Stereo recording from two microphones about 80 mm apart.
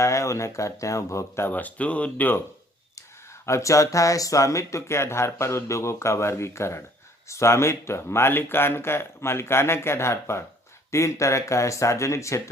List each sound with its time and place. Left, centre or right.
0.0 s speech: left
1.5 s speech: left
3.4 s speech: left